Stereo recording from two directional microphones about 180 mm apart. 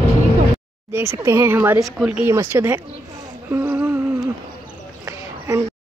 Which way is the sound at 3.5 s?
10° right (ahead or behind).